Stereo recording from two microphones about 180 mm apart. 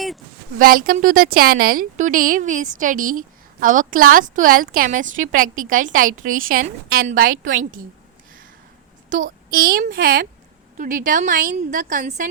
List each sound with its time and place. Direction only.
0.6 s a woman's voice: 55° right (ahead or behind)
9.0 s a woman's voice: 45° right (ahead or behind)